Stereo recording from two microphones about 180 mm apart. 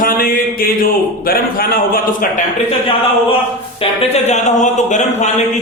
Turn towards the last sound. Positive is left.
turn(degrees=40)  # may be behind; listen again after turning